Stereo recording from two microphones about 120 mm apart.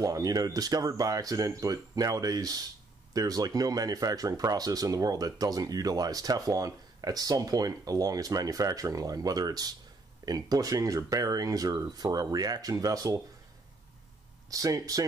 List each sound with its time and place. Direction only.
0.0 s speech: 30° right (ahead or behind)
14.5 s speech: 30° right (ahead or behind)